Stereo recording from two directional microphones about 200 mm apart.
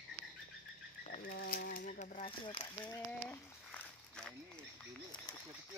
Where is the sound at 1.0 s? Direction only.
40° left (ahead or behind).